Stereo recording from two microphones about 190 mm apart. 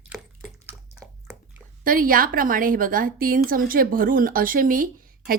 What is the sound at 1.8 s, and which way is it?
A woman's voice, 50° right (ahead or behind).